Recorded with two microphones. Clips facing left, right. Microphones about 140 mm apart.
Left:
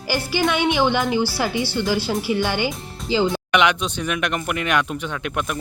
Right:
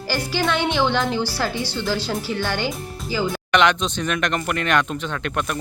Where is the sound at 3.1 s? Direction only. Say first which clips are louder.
Left 4 dB; 25° left (ahead or behind).